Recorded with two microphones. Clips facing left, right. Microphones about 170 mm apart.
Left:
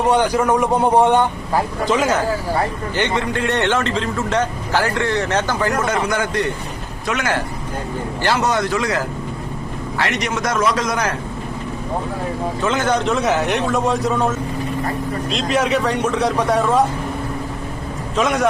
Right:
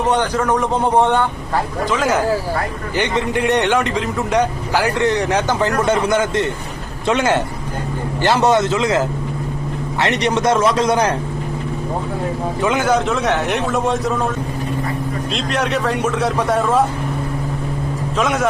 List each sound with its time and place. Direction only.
0.2 s a man's voice: 10° left (ahead or behind)
2.9 s a man's voice: 15° right (ahead or behind)
12.6 s a man's voice: 10° right (ahead or behind)
18.2 s a man's voice: centre (ahead or behind)